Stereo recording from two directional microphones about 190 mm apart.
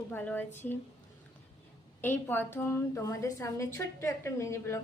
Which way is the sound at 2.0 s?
10° left (ahead or behind).